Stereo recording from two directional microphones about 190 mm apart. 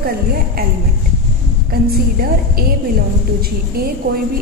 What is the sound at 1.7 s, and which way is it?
A woman's voice, 50° right (ahead or behind).